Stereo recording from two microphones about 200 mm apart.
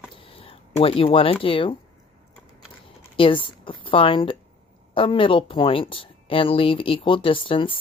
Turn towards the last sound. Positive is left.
turn(degrees=25)  # may be behind; listen again after turning